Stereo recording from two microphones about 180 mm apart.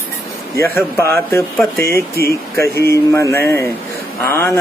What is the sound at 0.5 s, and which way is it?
Speech, 15° left (ahead or behind).